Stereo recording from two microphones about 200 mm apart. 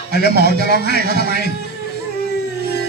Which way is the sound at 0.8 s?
50° right (ahead or behind).